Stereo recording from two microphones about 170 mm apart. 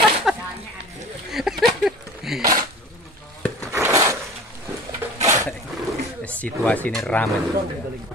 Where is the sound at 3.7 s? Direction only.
15° right (ahead or behind).